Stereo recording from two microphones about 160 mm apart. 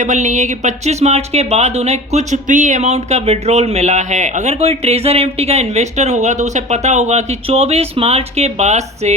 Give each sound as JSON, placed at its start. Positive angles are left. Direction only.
{"t": 0.0, "sound": "speech", "side_deg": -50}